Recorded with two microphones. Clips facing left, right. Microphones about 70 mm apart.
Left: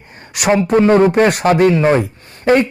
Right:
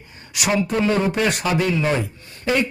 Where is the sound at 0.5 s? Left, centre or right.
Left.